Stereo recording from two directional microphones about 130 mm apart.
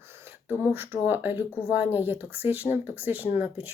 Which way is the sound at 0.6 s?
15° right (ahead or behind).